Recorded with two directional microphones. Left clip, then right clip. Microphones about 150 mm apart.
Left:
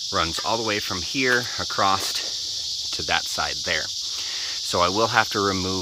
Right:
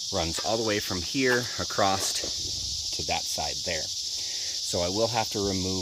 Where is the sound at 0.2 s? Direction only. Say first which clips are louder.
Left 4 dB; 10° right (ahead or behind).